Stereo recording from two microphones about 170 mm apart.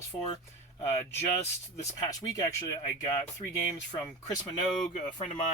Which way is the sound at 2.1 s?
20° left (ahead or behind).